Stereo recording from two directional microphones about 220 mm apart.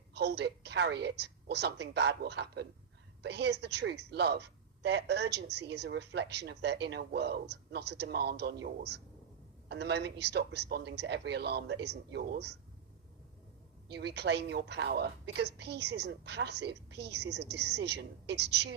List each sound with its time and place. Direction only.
0.1 s speech: 50° right (ahead or behind)
13.8 s speech: 50° right (ahead or behind)